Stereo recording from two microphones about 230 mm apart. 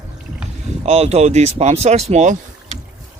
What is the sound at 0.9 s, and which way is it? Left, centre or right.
Speech, right.